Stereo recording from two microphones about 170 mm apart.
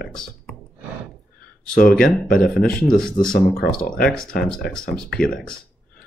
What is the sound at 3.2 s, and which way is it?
Speech, 50° left (ahead or behind).